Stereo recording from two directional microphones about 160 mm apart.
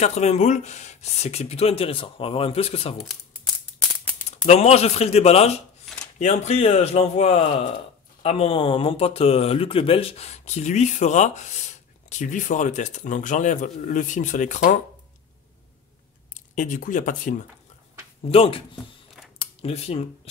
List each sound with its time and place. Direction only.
0.0 s speech: 45° left (ahead or behind)
4.3 s a man's voice: 40° left (ahead or behind)
16.3 s speech: 55° left (ahead or behind)
18.2 s speech: 35° left (ahead or behind)
19.3 s a sound: 35° left (ahead or behind)